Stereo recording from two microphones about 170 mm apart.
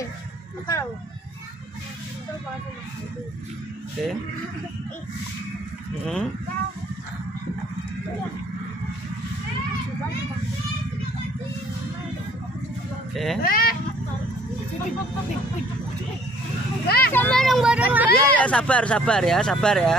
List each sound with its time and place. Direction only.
4.0 s speech: centre (ahead or behind)
13.1 s speech: centre (ahead or behind)
13.4 s speech: 60° left (ahead or behind)
16.8 s vehicle: 65° left (ahead or behind)
17.1 s vehicle: 10° left (ahead or behind); by 18.1 s 10° right (ahead or behind)
18.1 s speech: 5° left (ahead or behind)